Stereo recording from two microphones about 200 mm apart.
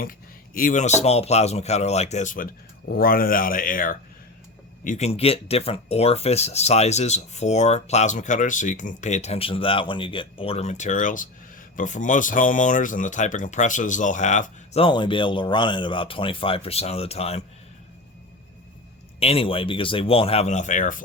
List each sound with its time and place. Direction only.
0.0 s speech: 45° left (ahead or behind)
19.2 s speech: 30° left (ahead or behind)